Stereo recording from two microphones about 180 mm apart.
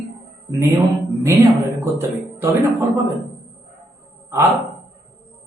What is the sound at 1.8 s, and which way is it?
Speech, 15° right (ahead or behind).